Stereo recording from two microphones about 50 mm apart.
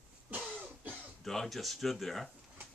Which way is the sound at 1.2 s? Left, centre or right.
Centre.